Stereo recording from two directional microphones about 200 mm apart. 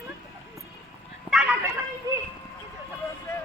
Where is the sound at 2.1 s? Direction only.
15° right (ahead or behind).